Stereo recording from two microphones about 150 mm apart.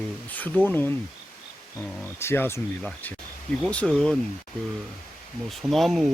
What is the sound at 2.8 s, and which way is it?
Speech, 5° left (ahead or behind).